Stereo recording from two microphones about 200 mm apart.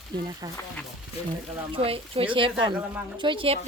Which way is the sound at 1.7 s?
30° right (ahead or behind).